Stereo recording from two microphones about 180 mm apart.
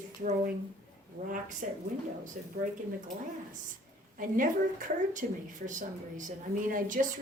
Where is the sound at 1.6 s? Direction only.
45° right (ahead or behind).